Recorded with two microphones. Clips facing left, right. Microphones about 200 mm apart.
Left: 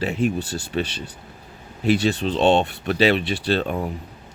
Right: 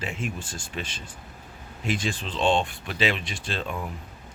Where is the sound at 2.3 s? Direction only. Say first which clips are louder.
Left 5 dB; 65° left (ahead or behind).